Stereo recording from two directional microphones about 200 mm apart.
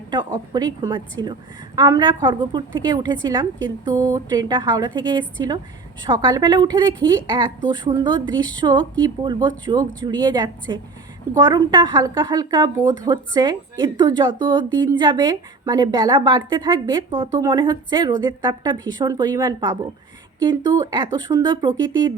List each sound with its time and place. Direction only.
0.3 s a woman's voice: 20° right (ahead or behind)